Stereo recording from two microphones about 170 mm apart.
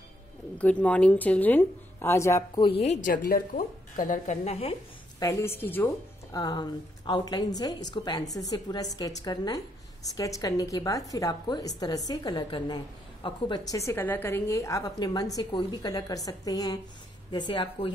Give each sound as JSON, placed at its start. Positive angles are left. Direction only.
{"t": 0.6, "sound": "speech", "side_deg": 10}
{"t": 2.6, "sound": "speech", "side_deg": 35}
{"t": 3.3, "sound": "a woman's voice", "side_deg": 55}
{"t": 5.2, "sound": "speech", "side_deg": 15}
{"t": 6.3, "sound": "a woman's voice", "side_deg": 25}